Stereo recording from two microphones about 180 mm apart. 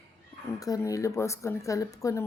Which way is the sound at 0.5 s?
20° left (ahead or behind).